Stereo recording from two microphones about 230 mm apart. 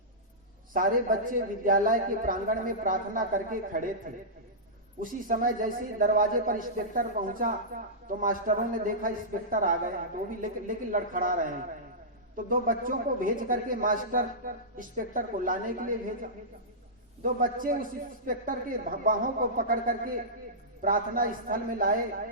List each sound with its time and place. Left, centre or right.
0.7 s a man's voice: right
4.9 s a man's voice: right
12.5 s a man's voice: right
17.4 s a man's voice: right